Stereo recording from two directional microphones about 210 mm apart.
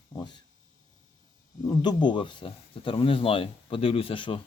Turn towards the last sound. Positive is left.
turn(degrees=25)  # may be behind; listen again after turning